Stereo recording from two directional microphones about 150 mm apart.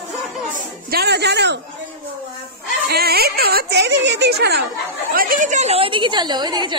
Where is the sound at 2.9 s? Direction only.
90° right.